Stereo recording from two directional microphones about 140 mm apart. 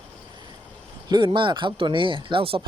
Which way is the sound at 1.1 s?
35° right (ahead or behind).